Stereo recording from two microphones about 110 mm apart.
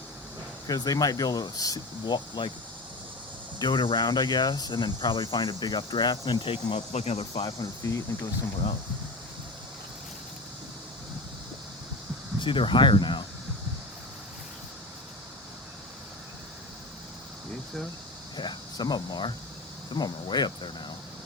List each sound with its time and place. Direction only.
0.7 s speech: 35° left (ahead or behind)
3.6 s speech: 45° left (ahead or behind)
6.9 s speech: 70° left (ahead or behind)
7.9 s speech: 30° left (ahead or behind)
12.4 s speech: 45° left (ahead or behind)
18.3 s speech: 40° left (ahead or behind)